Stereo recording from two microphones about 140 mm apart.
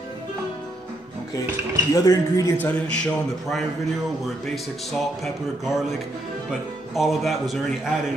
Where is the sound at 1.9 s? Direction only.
25° left (ahead or behind).